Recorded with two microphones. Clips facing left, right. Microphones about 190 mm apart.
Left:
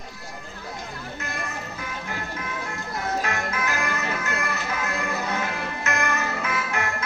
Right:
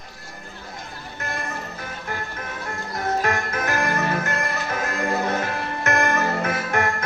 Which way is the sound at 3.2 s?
50° right (ahead or behind).